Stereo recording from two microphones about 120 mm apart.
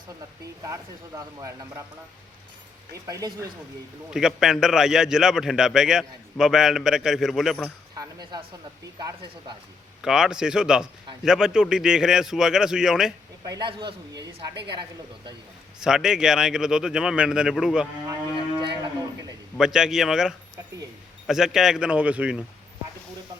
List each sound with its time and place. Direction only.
1.4 s speech: 25° right (ahead or behind)
3.1 s speech: 30° right (ahead or behind)
4.1 s a man's voice: 5° right (ahead or behind)
7.9 s speech: 35° right (ahead or behind)
10.0 s a man's voice: 5° right (ahead or behind)
13.4 s a man's voice: 30° right (ahead or behind)
15.8 s a man's voice: 5° right (ahead or behind)
18.6 s moo: 40° right (ahead or behind)
19.5 s a man's voice: 5° right (ahead or behind)